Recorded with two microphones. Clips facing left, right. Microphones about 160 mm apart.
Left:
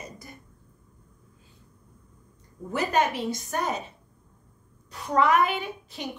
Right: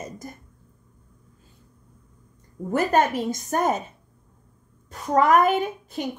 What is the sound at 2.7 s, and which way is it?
A woman's voice, 50° right (ahead or behind).